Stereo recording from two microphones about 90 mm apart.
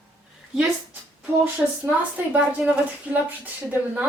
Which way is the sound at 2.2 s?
20° right (ahead or behind).